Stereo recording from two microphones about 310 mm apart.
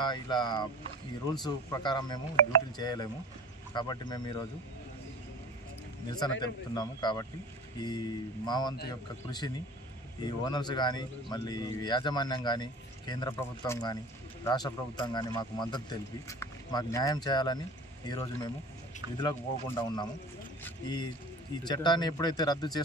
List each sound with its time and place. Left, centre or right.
0.0 s a man's voice: centre
6.1 s a man's voice: centre
8.5 s a man's voice: centre